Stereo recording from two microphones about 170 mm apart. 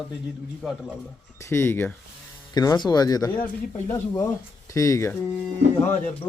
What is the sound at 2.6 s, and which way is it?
Speech, 25° left (ahead or behind).